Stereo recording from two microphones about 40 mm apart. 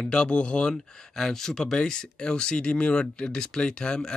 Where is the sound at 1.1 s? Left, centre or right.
Centre.